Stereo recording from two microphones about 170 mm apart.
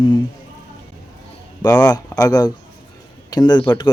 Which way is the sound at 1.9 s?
20° left (ahead or behind).